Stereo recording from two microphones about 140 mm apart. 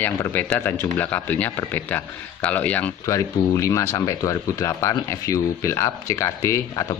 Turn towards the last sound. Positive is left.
turn(degrees=25)  # may be behind; listen again after turning